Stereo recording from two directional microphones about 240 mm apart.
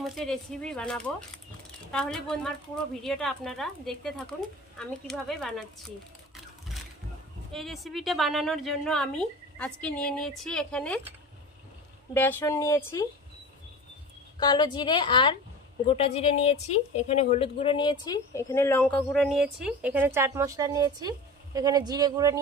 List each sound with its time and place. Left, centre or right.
0.0 s a woman's voice: centre
7.5 s a woman's voice: centre
12.1 s a woman's voice: centre
14.4 s a woman's voice: centre